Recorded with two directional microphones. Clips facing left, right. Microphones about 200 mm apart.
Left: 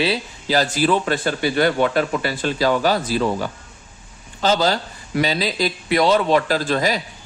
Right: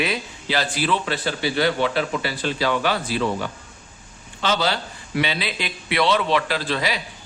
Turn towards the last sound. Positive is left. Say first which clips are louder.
# left 5 dB
turn(degrees=45)  # may be behind; listen again after turning